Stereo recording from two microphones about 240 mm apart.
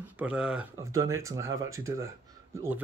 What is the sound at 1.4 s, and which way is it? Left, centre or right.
Speech, right.